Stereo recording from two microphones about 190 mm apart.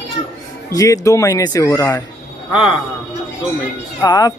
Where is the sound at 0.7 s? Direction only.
20° left (ahead or behind).